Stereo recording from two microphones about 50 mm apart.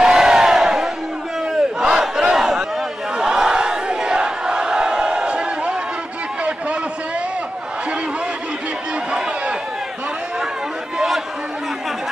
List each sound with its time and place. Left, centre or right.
0.0 s crowd: centre
1.5 s battle cry: centre
9.1 s a sound: centre